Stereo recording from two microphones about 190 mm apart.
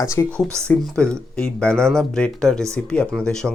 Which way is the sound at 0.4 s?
15° right (ahead or behind).